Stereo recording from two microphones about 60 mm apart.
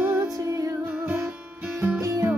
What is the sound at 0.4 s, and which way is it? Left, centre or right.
Music, right.